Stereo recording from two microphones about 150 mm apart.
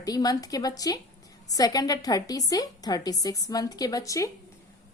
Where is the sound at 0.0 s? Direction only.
25° left (ahead or behind).